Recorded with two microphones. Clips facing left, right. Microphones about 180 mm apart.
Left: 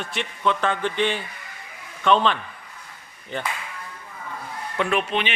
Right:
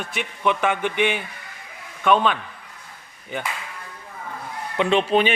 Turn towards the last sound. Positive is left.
turn(degrees=-35)  # may be behind; listen again after turning